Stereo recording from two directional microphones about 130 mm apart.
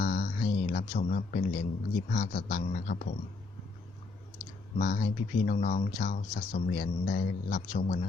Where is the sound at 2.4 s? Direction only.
90° left.